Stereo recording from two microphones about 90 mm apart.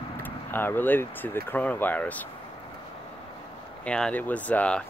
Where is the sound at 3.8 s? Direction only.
10° left (ahead or behind).